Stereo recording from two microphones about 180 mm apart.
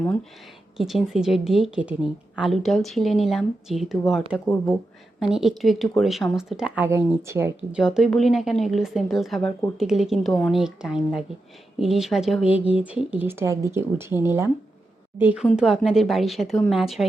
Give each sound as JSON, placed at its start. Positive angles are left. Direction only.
{"t": 0.8, "sound": "a woman's voice", "side_deg": 0}
{"t": 5.2, "sound": "a woman's voice", "side_deg": 0}
{"t": 7.8, "sound": "a woman's voice", "side_deg": -5}